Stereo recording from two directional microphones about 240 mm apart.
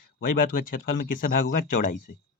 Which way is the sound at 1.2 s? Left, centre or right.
Left.